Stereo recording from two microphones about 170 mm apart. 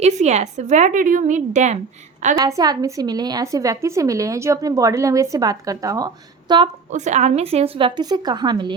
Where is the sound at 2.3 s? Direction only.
20° right (ahead or behind).